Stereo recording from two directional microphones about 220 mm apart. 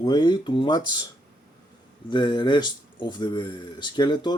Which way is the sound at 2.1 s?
20° left (ahead or behind).